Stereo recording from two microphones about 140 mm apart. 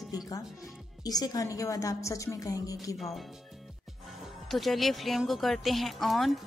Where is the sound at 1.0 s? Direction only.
25° left (ahead or behind).